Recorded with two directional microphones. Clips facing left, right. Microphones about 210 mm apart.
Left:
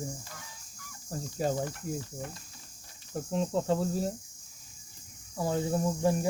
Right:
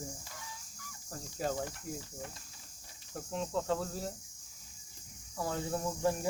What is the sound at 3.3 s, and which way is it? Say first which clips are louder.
Speech: left 5 dB; 30° left (ahead or behind).